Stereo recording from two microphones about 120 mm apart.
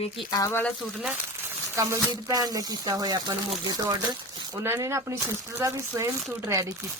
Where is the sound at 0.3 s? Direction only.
30° left (ahead or behind).